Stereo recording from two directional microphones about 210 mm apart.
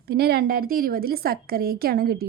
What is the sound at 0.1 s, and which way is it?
A woman's voice, 50° right (ahead or behind).